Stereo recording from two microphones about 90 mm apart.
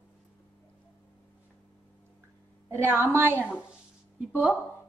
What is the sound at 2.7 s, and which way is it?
A woman's voice, 25° right (ahead or behind).